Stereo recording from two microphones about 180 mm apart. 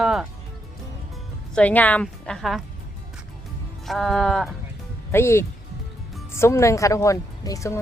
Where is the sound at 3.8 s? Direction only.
Centre (ahead or behind).